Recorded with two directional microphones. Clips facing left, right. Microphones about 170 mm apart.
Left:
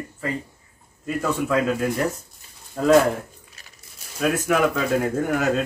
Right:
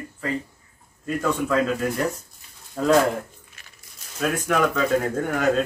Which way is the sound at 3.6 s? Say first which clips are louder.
Left 1 dB; 40° left (ahead or behind).